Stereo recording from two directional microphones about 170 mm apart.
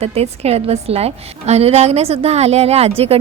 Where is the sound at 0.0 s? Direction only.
40° right (ahead or behind).